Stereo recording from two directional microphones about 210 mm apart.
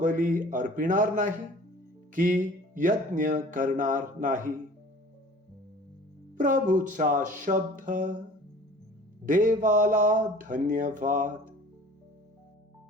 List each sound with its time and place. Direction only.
0.0 s speech: 40° right (ahead or behind)
6.3 s speech: 40° right (ahead or behind)
9.2 s speech: 40° right (ahead or behind)